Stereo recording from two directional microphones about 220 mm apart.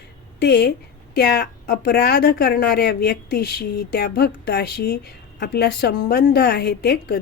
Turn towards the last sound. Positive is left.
turn(degrees=45)  # may be behind; listen again after turning